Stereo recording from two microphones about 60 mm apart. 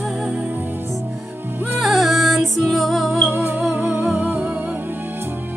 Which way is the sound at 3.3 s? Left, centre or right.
Right.